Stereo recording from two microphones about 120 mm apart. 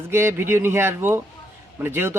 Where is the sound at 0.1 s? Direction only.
20° right (ahead or behind).